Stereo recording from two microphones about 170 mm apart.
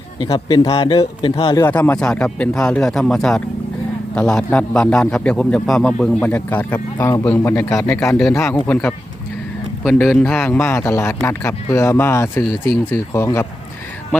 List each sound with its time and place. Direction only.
0.3 s speech: 25° left (ahead or behind)
1.5 s a man's voice: 10° left (ahead or behind)